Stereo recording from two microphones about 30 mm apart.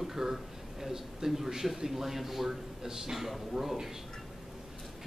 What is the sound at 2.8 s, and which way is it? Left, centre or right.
Speech, centre.